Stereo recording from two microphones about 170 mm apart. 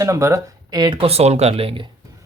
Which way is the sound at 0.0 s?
15° right (ahead or behind).